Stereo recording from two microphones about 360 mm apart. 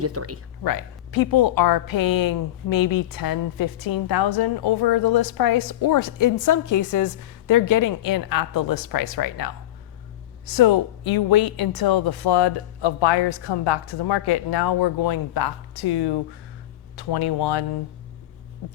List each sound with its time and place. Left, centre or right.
0.0 s speech: right
0.6 s a woman's voice: left